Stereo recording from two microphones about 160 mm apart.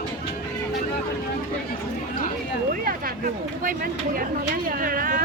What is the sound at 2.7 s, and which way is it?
Speech, 65° right (ahead or behind).